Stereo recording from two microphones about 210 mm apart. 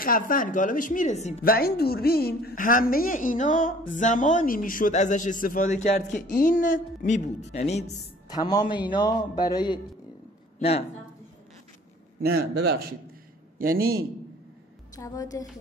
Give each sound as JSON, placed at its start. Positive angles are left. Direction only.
{"t": 0.0, "sound": "a woman's voice", "side_deg": 40}
{"t": 1.4, "sound": "a woman's voice", "side_deg": 45}
{"t": 8.3, "sound": "a man's voice", "side_deg": 20}
{"t": 12.2, "sound": "a man's voice", "side_deg": -50}
{"t": 15.0, "sound": "a woman's voice", "side_deg": 15}